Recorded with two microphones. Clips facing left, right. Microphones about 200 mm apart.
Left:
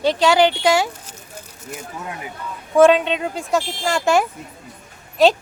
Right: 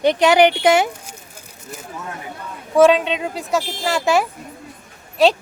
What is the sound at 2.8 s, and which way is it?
A woman's voice, centre (ahead or behind).